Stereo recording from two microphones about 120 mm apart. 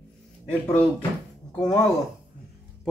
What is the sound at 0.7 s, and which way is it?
Speech, 15° left (ahead or behind).